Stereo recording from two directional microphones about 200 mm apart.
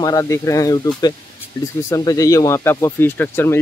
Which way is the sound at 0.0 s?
20° left (ahead or behind).